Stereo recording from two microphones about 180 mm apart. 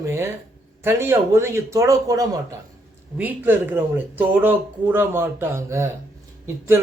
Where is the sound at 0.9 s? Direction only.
15° right (ahead or behind).